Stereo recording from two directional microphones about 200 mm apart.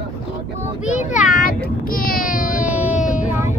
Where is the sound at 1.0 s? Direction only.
40° left (ahead or behind).